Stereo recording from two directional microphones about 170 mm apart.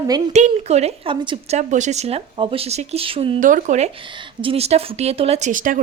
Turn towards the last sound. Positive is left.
turn(degrees=-50)  # may be behind; listen again after turning